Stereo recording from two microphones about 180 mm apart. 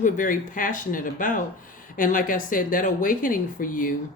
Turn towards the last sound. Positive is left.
turn(degrees=50)  # may be behind; listen again after turning